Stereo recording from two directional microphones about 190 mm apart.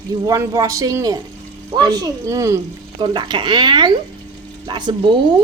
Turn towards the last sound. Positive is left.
turn(degrees=-25)  # may be behind; listen again after turning